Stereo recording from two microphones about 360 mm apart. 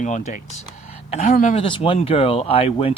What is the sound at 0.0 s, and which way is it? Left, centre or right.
Speech, centre.